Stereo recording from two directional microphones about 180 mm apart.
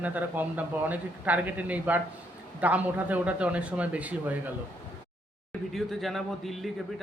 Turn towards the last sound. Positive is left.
turn(degrees=0)  # may be behind; listen again after turning